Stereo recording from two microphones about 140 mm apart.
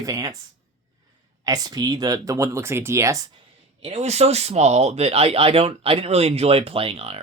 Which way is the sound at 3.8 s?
45° right (ahead or behind).